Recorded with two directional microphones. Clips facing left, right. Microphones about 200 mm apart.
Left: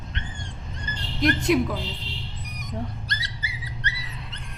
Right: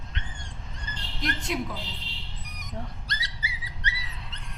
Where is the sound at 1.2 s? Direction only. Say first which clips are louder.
Left 10 dB; 70° left (ahead or behind).